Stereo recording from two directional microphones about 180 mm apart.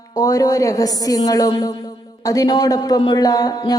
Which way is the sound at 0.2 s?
20° left (ahead or behind).